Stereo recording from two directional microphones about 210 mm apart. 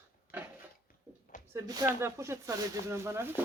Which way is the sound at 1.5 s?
15° right (ahead or behind).